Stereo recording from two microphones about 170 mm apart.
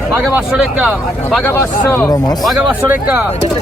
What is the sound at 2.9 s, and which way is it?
Speech, 10° right (ahead or behind).